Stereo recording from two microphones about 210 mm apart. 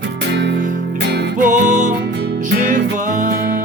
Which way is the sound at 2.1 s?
55° right (ahead or behind).